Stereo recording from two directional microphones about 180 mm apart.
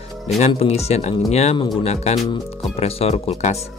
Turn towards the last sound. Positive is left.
turn(degrees=35)  # may be behind; listen again after turning